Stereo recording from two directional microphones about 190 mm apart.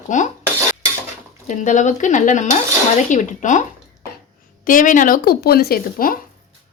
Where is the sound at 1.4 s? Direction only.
40° left (ahead or behind).